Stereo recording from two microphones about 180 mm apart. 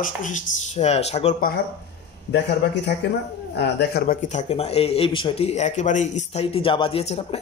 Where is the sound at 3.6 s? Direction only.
65° left (ahead or behind).